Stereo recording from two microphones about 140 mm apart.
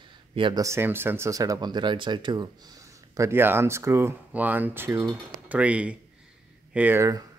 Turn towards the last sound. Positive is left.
turn(degrees=-20)  # may be behind; listen again after turning